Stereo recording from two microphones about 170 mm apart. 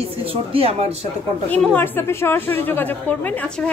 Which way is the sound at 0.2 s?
35° right (ahead or behind).